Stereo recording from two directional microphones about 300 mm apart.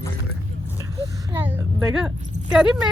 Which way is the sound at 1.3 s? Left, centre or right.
Centre.